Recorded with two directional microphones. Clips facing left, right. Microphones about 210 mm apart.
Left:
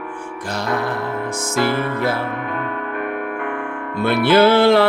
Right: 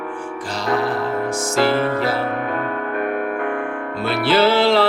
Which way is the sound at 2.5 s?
35° right (ahead or behind).